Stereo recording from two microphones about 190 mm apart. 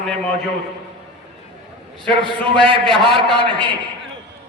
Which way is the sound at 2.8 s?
Centre (ahead or behind).